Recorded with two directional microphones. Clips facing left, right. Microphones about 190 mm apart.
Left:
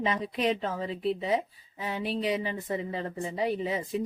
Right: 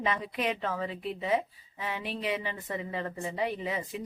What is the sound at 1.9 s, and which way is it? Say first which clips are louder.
Speech: left 4 dB; 40° left (ahead or behind).